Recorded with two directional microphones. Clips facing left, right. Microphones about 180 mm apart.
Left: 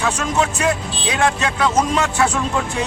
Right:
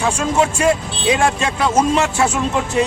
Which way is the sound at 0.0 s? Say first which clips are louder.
Right 3 dB; 30° right (ahead or behind).